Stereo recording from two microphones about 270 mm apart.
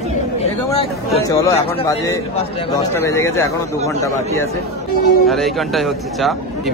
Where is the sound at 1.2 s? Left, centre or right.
Centre.